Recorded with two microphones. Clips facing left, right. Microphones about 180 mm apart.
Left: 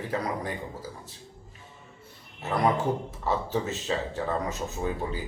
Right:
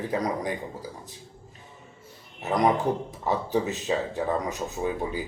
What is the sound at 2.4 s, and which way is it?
Speech, 15° right (ahead or behind).